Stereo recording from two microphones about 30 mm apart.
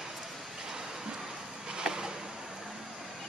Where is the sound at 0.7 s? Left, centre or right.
Centre.